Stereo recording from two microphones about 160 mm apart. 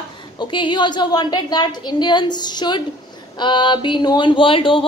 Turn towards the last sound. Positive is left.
turn(degrees=35)  # may be behind; listen again after turning